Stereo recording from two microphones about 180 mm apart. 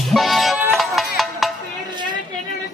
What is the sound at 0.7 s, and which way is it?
Music, centre (ahead or behind).